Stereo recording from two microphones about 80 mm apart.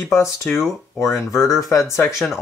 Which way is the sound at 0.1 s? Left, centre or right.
Left.